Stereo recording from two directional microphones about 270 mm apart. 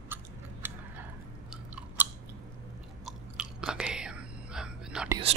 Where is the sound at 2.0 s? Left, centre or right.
Centre.